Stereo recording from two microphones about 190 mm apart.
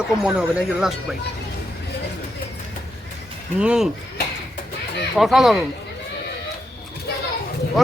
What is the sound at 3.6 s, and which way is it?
Speech, 5° right (ahead or behind).